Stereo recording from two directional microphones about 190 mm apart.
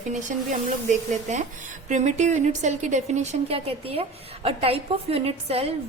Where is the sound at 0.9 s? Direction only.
40° right (ahead or behind).